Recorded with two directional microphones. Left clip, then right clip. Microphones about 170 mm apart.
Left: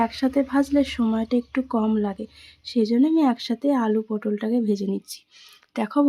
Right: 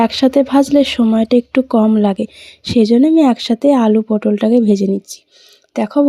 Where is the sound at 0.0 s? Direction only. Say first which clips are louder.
Right 10 dB; 35° right (ahead or behind).